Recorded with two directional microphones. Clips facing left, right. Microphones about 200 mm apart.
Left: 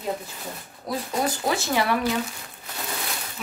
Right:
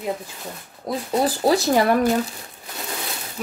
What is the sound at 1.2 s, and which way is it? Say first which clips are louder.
Speech: right 9 dB; 35° right (ahead or behind).